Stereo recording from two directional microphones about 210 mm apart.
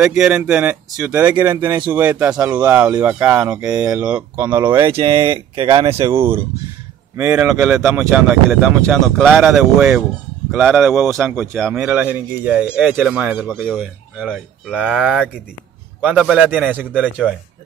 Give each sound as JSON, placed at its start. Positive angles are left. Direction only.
{"t": 0.0, "sound": "speech", "side_deg": -5}
{"t": 4.8, "sound": "speech", "side_deg": -25}
{"t": 5.9, "sound": "speech", "side_deg": -10}